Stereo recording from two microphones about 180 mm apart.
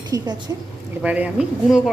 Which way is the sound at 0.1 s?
20° right (ahead or behind).